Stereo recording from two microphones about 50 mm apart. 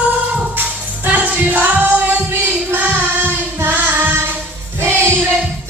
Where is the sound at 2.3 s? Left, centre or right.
Right.